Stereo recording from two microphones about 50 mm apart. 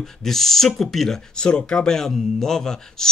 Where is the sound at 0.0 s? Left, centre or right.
Centre.